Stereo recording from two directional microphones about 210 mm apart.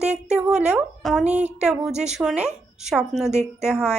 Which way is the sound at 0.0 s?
5° right (ahead or behind).